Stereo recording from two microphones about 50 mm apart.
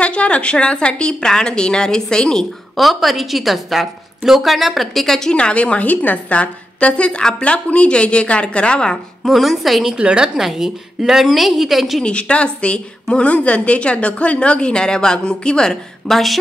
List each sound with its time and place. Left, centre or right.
0.0 s a woman's voice: left
2.8 s a woman's voice: centre
5.3 s a woman's voice: left
9.2 s a woman's voice: centre
9.9 s a woman's voice: centre
10.3 s a woman's voice: centre
12.0 s a woman's voice: left; by 16.3 s centre